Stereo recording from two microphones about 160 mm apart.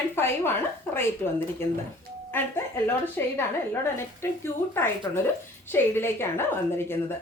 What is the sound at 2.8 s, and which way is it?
Speech, 15° left (ahead or behind).